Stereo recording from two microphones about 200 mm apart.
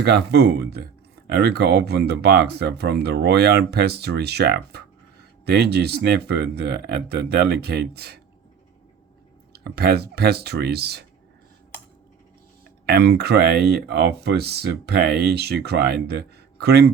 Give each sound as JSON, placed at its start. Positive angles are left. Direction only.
{"t": 0.0, "sound": "speech", "side_deg": -55}
{"t": 9.5, "sound": "speech", "side_deg": -55}
{"t": 12.8, "sound": "speech", "side_deg": -55}